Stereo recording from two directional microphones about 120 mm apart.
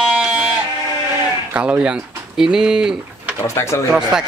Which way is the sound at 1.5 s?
10° right (ahead or behind).